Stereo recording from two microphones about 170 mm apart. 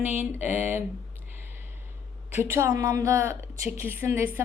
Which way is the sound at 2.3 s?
15° right (ahead or behind).